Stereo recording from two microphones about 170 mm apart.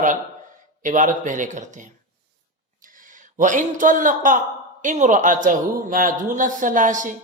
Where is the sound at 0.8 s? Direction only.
50° right (ahead or behind).